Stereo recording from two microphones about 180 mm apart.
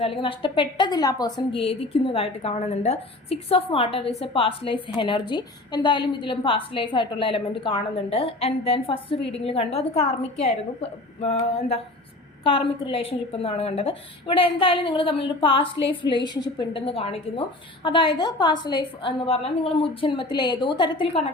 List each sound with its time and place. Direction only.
0.0 s a woman's voice: 30° left (ahead or behind)